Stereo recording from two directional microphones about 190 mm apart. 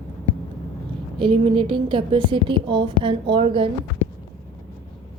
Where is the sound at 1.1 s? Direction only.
25° right (ahead or behind).